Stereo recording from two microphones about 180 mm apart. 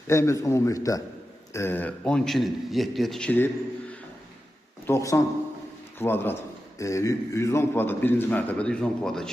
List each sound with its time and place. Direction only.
0.1 s a man's voice: 15° left (ahead or behind)
4.9 s a man's voice: 15° left (ahead or behind)